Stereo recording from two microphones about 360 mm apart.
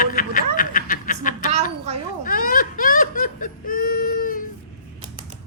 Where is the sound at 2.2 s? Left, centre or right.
Left.